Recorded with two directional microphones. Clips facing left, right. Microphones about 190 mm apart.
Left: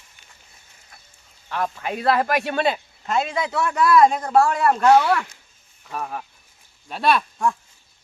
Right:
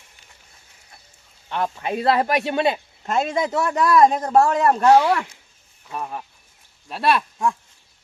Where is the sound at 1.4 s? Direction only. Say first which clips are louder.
Right 1 dB; 25° right (ahead or behind).